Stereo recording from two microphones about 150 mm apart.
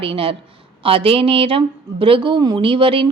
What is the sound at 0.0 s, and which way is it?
Speech, 35° right (ahead or behind).